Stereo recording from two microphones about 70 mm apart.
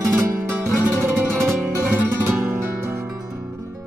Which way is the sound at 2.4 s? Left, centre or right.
Right.